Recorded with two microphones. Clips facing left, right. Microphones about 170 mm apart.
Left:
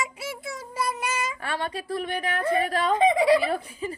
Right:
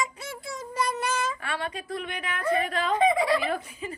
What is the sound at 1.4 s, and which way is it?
A woman's voice, 35° left (ahead or behind).